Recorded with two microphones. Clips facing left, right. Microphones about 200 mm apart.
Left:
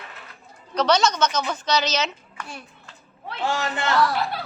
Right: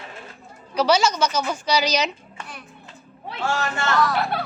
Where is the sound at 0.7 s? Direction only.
10° right (ahead or behind).